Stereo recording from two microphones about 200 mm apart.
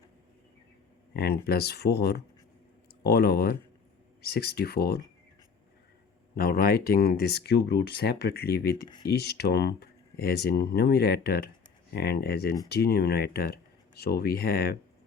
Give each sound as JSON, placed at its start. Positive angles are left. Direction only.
{"t": 1.1, "sound": "speech", "side_deg": 50}
{"t": 6.3, "sound": "speech", "side_deg": 50}